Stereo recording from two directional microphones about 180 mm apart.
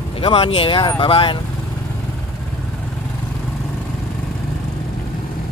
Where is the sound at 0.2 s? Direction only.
30° left (ahead or behind).